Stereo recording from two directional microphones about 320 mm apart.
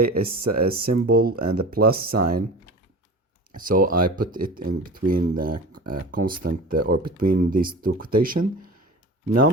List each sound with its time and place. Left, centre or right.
0.0 s speech: right
3.6 s speech: right